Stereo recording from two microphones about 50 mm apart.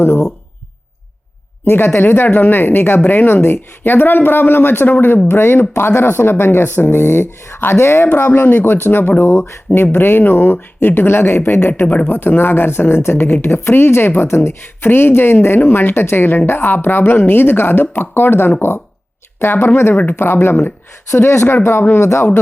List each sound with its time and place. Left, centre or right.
0.0 s speech: left
1.6 s speech: left
8.0 s speech: left
19.6 s speech: left